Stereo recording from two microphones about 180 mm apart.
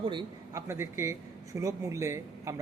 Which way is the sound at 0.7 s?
15° right (ahead or behind).